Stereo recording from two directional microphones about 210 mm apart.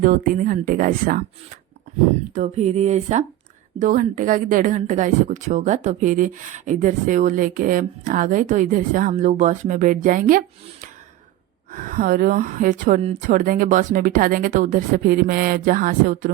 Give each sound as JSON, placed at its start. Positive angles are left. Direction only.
{"t": 0.0, "sound": "a woman's voice", "side_deg": -40}
{"t": 2.3, "sound": "a woman's voice", "side_deg": -35}